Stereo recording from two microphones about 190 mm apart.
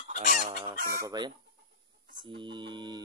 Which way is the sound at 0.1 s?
40° right (ahead or behind).